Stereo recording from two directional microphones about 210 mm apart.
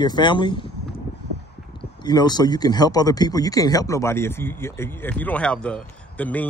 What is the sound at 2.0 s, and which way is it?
Speech, 20° left (ahead or behind).